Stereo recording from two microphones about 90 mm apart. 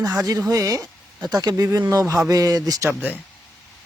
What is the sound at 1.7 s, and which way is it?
Speech, 30° right (ahead or behind).